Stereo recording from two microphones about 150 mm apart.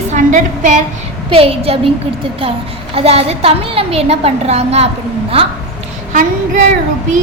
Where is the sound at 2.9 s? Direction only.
45° right (ahead or behind).